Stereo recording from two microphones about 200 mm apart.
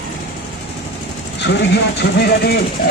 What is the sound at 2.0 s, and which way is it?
Speech, 55° left (ahead or behind).